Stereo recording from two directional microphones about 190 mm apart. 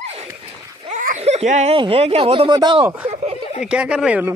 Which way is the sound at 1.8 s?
30° right (ahead or behind).